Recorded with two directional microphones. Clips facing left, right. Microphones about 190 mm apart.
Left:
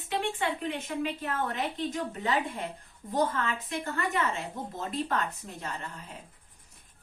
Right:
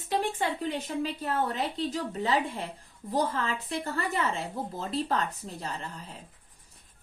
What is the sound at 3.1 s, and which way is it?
Speech, 35° right (ahead or behind).